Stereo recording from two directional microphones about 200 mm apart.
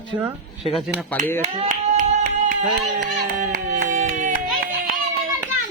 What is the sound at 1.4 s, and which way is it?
Clapping, 35° right (ahead or behind).